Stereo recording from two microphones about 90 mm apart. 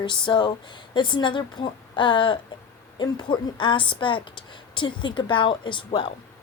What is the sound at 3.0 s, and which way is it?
A woman's voice, 55° left (ahead or behind).